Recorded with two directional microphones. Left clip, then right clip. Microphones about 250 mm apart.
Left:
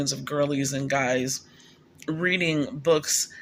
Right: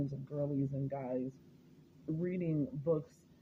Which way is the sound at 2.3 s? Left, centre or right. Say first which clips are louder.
Left 18 dB; left.